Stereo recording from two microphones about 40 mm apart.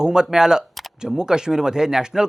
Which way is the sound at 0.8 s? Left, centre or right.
Centre.